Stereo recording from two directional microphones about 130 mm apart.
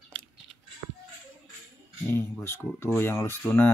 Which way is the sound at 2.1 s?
15° left (ahead or behind).